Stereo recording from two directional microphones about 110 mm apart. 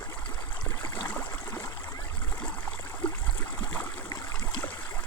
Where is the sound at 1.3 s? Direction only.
30° left (ahead or behind).